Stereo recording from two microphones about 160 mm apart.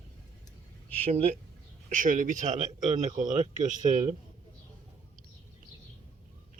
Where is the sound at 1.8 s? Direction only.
55° right (ahead or behind).